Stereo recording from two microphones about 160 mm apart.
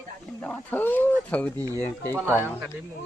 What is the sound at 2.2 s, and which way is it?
Speech, 10° right (ahead or behind).